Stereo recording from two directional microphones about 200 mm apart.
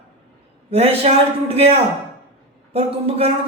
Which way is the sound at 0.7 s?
30° right (ahead or behind).